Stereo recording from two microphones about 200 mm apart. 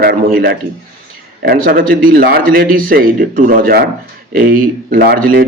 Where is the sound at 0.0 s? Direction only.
50° right (ahead or behind).